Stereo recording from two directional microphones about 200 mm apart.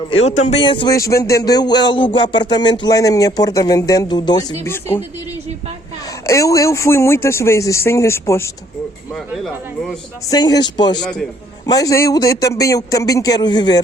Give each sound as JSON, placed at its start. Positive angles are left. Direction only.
{"t": 0.3, "sound": "speech", "side_deg": 35}
{"t": 6.2, "sound": "speech", "side_deg": 15}
{"t": 9.1, "sound": "speech", "side_deg": 0}
{"t": 10.2, "sound": "speech", "side_deg": 20}
{"t": 11.0, "sound": "speech", "side_deg": 5}
{"t": 11.6, "sound": "speech", "side_deg": 20}